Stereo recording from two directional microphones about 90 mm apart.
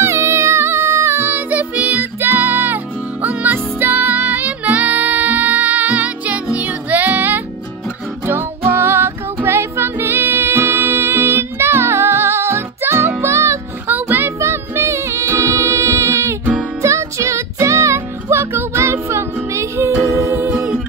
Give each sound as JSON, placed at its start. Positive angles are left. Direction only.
{"t": 0.0, "sound": "music", "side_deg": -35}
{"t": 13.9, "sound": "music", "side_deg": -20}
{"t": 20.2, "sound": "a capella", "side_deg": -30}